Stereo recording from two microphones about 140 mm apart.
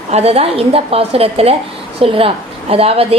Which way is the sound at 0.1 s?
50° right (ahead or behind).